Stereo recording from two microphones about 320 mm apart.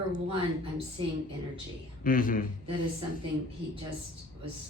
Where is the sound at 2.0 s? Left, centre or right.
Left.